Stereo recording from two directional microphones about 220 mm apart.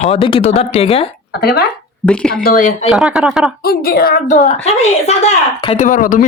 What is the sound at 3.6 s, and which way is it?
A woman's voice, 40° left (ahead or behind).